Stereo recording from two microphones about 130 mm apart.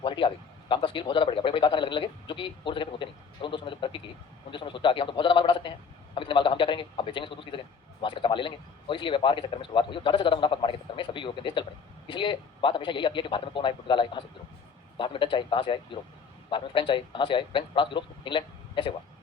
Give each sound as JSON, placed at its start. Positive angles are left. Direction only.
{"t": 0.0, "sound": "a man's voice", "side_deg": 40}